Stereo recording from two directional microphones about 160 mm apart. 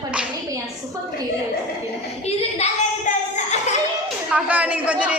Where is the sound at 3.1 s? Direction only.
50° left (ahead or behind).